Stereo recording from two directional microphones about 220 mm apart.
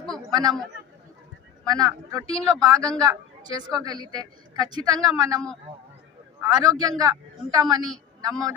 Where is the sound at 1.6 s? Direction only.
15° right (ahead or behind).